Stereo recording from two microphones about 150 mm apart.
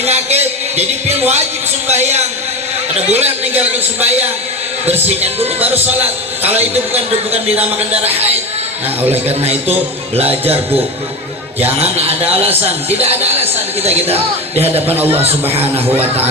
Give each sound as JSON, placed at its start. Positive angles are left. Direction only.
{"t": 0.0, "sound": "a sound", "side_deg": -45}
{"t": 1.9, "sound": "a man's voice", "side_deg": -50}
{"t": 9.2, "sound": "a man's voice", "side_deg": -45}
{"t": 11.8, "sound": "a man's voice", "side_deg": -40}